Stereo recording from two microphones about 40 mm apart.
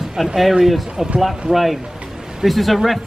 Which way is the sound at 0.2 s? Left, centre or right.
Centre.